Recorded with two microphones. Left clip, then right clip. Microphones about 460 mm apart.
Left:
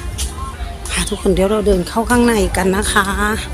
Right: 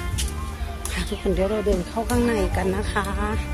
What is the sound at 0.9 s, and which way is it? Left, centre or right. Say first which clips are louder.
Speech: left 9 dB; right.